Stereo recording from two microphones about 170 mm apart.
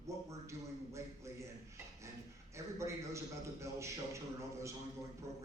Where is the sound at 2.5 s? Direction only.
15° right (ahead or behind).